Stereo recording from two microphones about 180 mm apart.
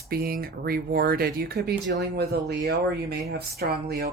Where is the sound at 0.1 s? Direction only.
55° right (ahead or behind).